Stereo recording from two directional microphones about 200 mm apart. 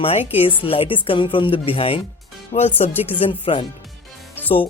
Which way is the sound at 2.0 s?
Centre (ahead or behind).